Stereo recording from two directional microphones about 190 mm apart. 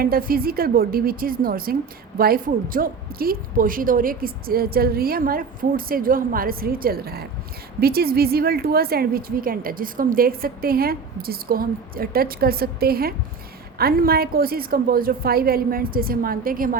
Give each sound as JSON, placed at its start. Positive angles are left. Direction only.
{"t": 0.0, "sound": "speech", "side_deg": -50}